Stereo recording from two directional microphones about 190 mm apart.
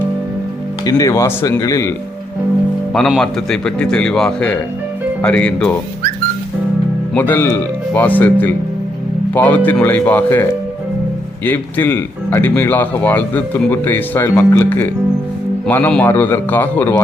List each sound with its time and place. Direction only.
0.9 s speech: 20° left (ahead or behind)
2.9 s a man's voice: centre (ahead or behind)
7.1 s speech: 10° left (ahead or behind)
11.4 s speech: 10° left (ahead or behind)